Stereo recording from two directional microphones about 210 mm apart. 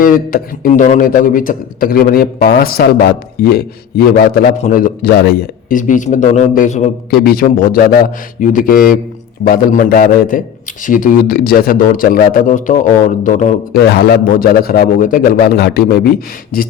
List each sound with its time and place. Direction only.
0.0 s speech: 45° left (ahead or behind)
7.1 s speech: 45° left (ahead or behind)
13.7 s speech: 50° left (ahead or behind)